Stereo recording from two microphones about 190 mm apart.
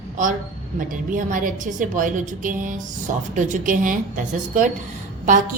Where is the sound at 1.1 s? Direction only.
45° right (ahead or behind).